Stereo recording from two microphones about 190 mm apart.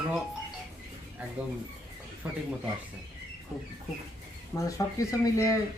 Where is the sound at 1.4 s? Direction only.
5° right (ahead or behind).